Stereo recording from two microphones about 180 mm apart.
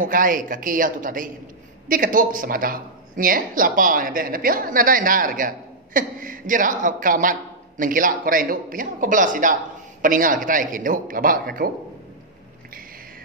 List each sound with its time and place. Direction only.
0.0 s speech: 50° right (ahead or behind)